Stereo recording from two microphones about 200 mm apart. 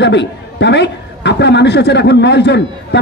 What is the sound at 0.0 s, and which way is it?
A man's voice, 60° left (ahead or behind).